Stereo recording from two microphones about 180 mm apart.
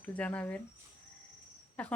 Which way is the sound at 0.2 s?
10° left (ahead or behind).